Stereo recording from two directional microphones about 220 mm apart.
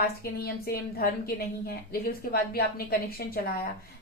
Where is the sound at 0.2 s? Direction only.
45° left (ahead or behind).